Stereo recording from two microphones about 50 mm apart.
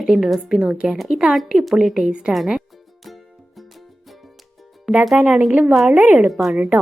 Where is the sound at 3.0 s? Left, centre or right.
Centre.